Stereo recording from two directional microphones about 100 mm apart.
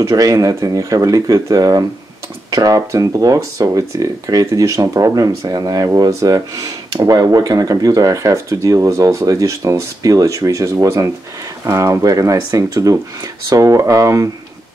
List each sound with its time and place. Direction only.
0.1 s speech: 35° right (ahead or behind)